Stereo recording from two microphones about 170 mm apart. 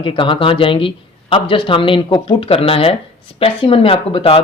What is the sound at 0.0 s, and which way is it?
Speech, 30° left (ahead or behind).